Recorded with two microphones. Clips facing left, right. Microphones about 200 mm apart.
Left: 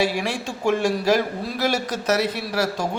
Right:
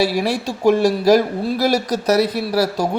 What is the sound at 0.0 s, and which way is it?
Speech, 40° right (ahead or behind).